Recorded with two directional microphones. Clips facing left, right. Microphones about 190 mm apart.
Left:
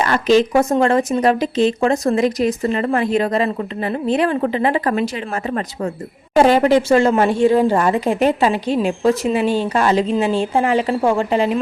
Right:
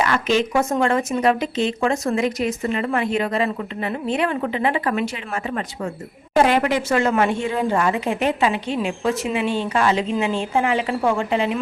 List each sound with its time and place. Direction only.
0.0 s speech: 40° left (ahead or behind)